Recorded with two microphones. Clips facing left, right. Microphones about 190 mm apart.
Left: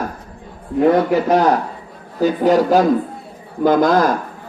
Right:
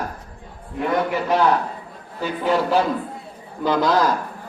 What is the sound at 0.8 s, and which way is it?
A man's voice, 40° left (ahead or behind).